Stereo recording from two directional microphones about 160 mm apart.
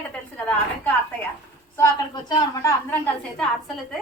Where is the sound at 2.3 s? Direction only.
25° left (ahead or behind).